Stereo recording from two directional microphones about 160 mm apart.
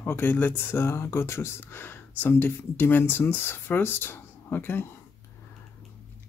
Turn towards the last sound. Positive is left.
turn(degrees=15)  # may be behind; listen again after turning